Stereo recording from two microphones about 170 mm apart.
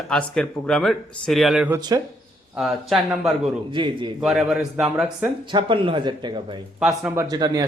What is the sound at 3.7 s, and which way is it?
Speech, 25° right (ahead or behind).